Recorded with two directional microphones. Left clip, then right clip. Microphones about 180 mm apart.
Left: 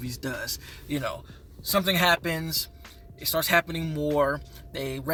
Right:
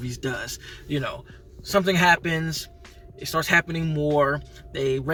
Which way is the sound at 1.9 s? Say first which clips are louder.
Right 3 dB; 25° left (ahead or behind).